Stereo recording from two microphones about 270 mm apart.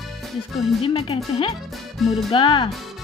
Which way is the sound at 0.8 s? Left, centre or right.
Centre.